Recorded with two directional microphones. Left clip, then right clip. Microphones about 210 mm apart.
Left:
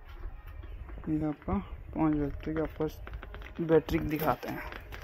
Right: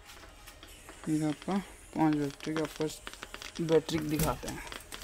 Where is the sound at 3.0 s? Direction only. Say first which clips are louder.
Right 4 dB; 55° right (ahead or behind).